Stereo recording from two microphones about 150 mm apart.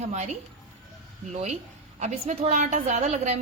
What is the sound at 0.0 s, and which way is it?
A woman's voice, 50° right (ahead or behind).